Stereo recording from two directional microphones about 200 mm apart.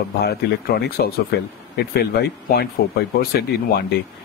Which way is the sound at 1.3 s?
55° left (ahead or behind).